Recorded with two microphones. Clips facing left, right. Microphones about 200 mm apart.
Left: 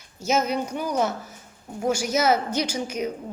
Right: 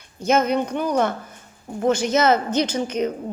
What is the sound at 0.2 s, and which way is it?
Speech, 55° right (ahead or behind).